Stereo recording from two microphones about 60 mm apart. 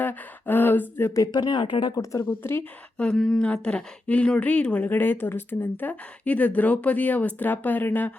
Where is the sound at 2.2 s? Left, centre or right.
Left.